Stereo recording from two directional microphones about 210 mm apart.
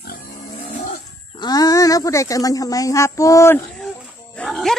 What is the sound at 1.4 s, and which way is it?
Speech, 20° left (ahead or behind).